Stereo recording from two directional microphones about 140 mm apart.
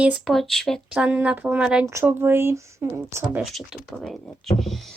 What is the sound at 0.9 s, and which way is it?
Speech, 10° right (ahead or behind).